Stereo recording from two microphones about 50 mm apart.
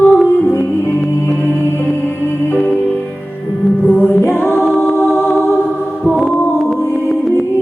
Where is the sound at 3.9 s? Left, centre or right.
Left.